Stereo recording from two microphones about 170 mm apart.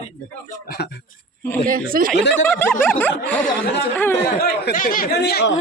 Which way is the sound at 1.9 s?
55° right (ahead or behind).